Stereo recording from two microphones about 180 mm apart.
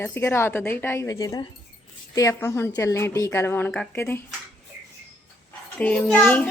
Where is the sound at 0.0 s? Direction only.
15° left (ahead or behind).